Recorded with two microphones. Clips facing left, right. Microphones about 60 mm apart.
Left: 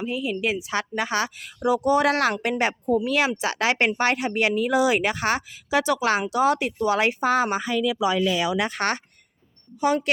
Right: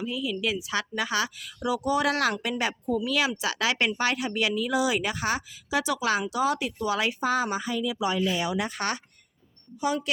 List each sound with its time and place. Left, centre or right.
0.0 s a woman's voice: left